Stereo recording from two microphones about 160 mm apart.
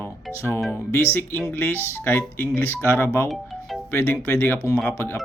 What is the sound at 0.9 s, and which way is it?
Speech, 15° left (ahead or behind).